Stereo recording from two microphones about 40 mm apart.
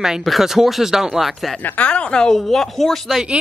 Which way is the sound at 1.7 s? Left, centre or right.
Left.